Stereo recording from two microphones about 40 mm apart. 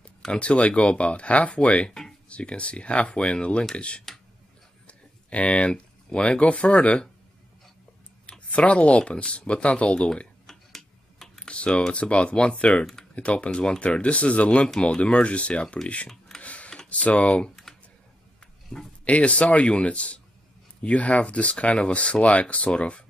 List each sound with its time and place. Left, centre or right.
0.3 s speech: left
1.9 s a sound: centre
2.2 s speech: left
4.8 s a sound: left
6.4 s speech: left
8.3 s speech: left
10.4 s a sound: centre
11.4 s computer keyboard: left
11.9 s speech: left
16.3 s a sound: left
16.9 s speech: left
18.7 s speech: centre
19.0 s speech: left